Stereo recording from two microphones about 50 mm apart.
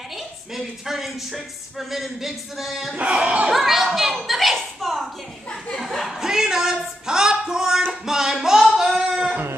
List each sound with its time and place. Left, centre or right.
0.6 s speech: centre
2.9 s speech: centre
3.5 s a woman's voice: centre
6.0 s a sound: centre